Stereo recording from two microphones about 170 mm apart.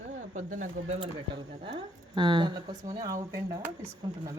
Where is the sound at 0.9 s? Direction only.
30° right (ahead or behind).